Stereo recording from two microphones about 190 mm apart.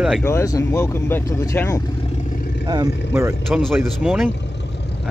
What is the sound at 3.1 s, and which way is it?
Speech, 10° right (ahead or behind).